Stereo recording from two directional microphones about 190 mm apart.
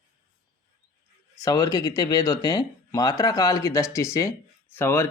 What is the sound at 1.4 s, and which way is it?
Speech, 20° left (ahead or behind).